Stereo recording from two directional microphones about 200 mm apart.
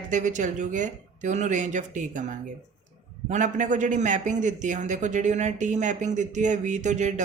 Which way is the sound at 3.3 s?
40° right (ahead or behind).